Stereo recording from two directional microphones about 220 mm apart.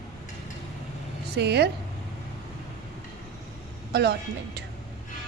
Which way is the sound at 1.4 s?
50° right (ahead or behind).